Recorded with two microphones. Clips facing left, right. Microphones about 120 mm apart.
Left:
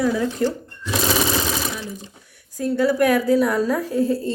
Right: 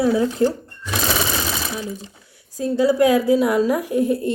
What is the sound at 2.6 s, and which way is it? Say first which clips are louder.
A woman's voice: right 2 dB; 15° right (ahead or behind).